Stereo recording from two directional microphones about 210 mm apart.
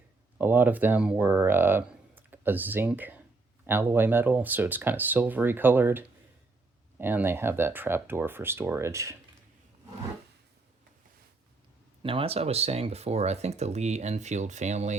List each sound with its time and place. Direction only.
0.3 s speech: 10° right (ahead or behind)
12.0 s speech: 25° right (ahead or behind)